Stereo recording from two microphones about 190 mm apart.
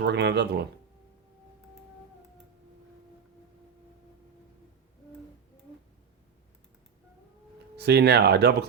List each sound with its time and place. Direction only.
0.0 s speech: 65° right (ahead or behind)
7.8 s speech: 60° right (ahead or behind)